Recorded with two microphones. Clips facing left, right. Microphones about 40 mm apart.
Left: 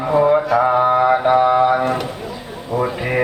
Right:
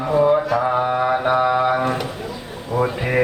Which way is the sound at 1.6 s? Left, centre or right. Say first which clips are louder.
Left 3 dB; centre.